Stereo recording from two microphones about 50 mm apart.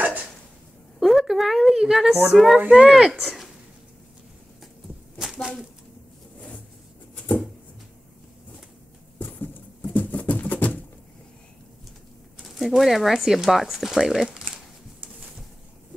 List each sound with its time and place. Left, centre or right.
0.9 s a sound: centre
2.2 s speech: centre
2.6 s speech: right
2.9 s speech: centre
9.2 s horse: left
9.9 s a sound: left
12.5 s speech: centre